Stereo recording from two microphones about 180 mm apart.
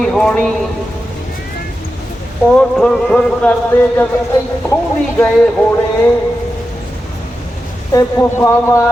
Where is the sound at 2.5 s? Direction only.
5° left (ahead or behind).